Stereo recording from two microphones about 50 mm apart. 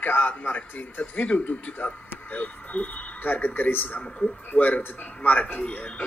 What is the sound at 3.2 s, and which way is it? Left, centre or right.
A man's voice, left.